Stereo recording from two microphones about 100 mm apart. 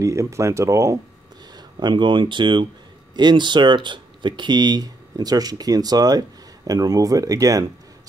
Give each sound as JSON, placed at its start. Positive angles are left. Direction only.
{"t": 0.0, "sound": "speech", "side_deg": -30}
{"t": 1.8, "sound": "speech", "side_deg": -50}